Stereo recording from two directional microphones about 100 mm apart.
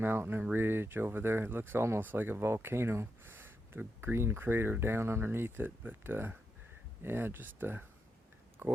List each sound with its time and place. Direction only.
0.0 s speech: 20° right (ahead or behind)